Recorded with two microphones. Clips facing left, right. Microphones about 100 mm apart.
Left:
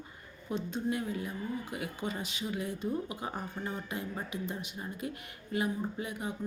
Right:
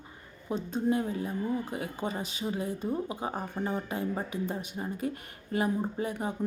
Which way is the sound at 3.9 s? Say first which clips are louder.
Right 5 dB; 35° right (ahead or behind).